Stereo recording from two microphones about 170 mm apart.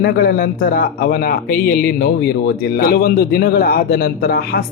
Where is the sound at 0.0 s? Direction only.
60° left (ahead or behind).